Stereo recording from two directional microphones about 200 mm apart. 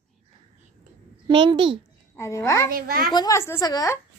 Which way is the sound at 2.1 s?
15° left (ahead or behind).